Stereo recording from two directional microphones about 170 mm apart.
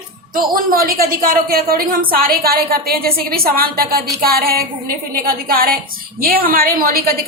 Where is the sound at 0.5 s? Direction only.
60° right (ahead or behind).